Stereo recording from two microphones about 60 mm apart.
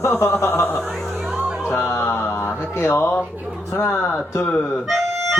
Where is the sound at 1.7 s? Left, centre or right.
Left.